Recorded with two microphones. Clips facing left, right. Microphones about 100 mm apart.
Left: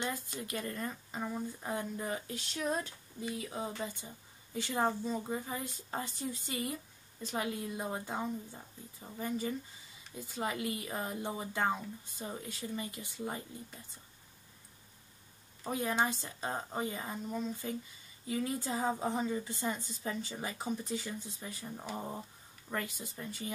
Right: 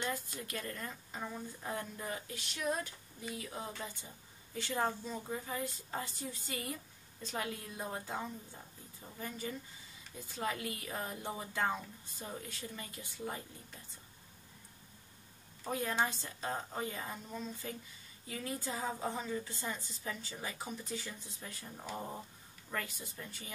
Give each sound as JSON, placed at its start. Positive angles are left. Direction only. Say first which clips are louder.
{"t": 0.0, "sound": "a woman's voice", "louder": "left 1 dB", "side_deg": 20}
{"t": 3.2, "sound": "a woman's voice", "louder": "left 5 dB", "side_deg": 20}
{"t": 15.6, "sound": "a woman's voice", "louder": "left 2 dB", "side_deg": 15}